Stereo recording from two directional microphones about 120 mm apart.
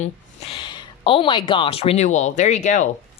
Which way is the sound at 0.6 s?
40° left (ahead or behind).